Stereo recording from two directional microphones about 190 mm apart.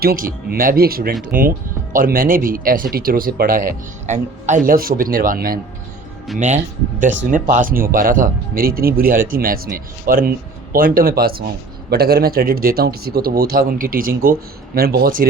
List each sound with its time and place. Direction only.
0.0 s a man's voice: 50° right (ahead or behind)
3.7 s a man's voice: 40° right (ahead or behind)
6.3 s speech: centre (ahead or behind)
7.3 s a man's voice: 45° right (ahead or behind)